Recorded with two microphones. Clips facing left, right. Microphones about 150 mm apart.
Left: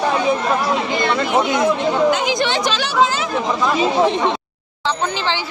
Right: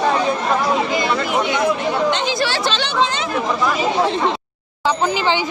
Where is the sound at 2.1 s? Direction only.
15° left (ahead or behind).